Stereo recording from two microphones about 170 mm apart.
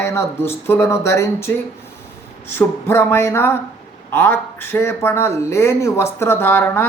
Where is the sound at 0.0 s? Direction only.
15° left (ahead or behind).